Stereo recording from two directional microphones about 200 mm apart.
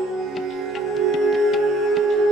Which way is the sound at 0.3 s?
Centre (ahead or behind).